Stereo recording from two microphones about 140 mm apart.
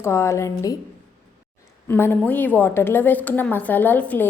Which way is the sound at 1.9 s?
15° left (ahead or behind).